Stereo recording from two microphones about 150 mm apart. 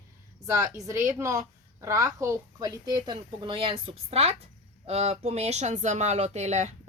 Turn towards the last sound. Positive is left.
turn(degrees=-50)  # may be behind; listen again after turning